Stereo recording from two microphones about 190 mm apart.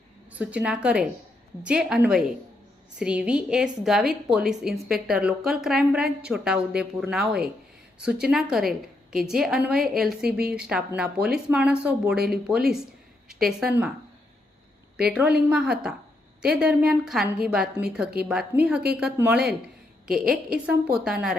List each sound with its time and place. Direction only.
0.3 s a woman's voice: 5° right (ahead or behind)
10.2 s speech: 55° right (ahead or behind)
10.5 s a woman's voice: 5° right (ahead or behind)
15.4 s a woman's voice: 5° right (ahead or behind)